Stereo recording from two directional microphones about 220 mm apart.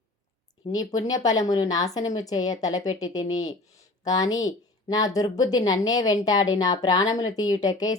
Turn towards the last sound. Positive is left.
turn(degrees=15)  # may be behind; listen again after turning